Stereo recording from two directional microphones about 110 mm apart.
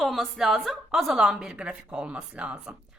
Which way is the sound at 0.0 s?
Centre (ahead or behind).